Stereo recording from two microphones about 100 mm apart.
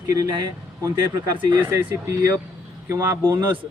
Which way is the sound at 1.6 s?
30° right (ahead or behind).